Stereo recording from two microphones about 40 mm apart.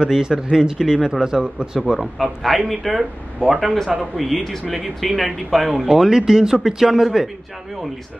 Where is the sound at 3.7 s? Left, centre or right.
Centre.